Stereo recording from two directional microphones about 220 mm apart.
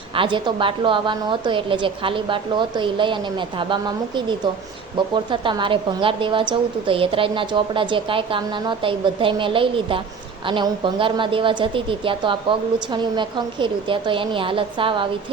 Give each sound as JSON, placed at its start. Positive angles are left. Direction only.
{"t": 0.1, "sound": "a woman's voice", "side_deg": -25}